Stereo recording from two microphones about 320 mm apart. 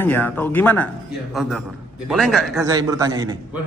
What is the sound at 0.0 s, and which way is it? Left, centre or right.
Speech, centre.